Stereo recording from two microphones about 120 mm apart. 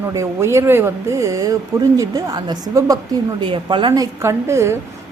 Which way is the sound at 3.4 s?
40° right (ahead or behind).